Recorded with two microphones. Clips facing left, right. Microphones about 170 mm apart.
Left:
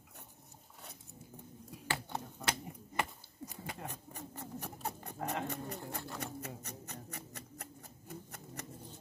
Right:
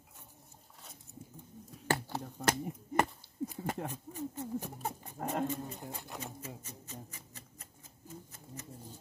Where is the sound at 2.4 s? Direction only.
45° right (ahead or behind).